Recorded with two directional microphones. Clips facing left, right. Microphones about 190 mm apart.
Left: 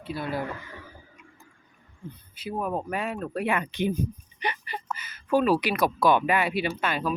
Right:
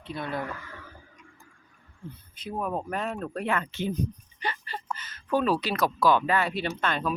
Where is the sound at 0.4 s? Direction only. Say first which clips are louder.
Left 2 dB; 20° left (ahead or behind).